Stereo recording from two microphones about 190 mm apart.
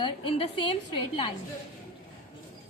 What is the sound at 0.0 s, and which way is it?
A woman's voice, 25° left (ahead or behind).